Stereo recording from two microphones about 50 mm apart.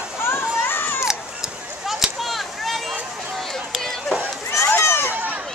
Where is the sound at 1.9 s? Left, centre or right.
Centre.